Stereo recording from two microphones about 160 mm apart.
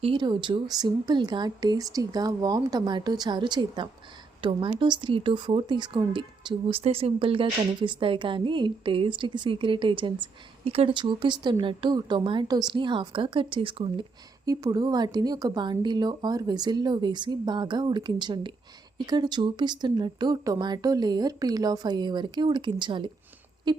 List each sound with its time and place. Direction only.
0.0 s a woman's voice: 30° right (ahead or behind)
14.4 s a woman's voice: 20° right (ahead or behind)